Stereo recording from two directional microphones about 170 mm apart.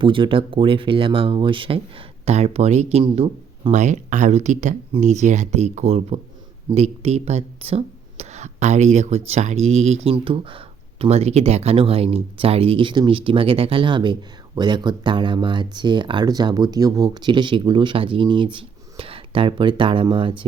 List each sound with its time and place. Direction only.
0.0 s speech: 30° right (ahead or behind)